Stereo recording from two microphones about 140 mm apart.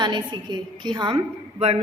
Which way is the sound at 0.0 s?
30° right (ahead or behind).